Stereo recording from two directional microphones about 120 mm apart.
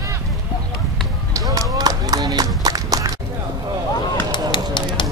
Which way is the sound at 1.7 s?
35° right (ahead or behind).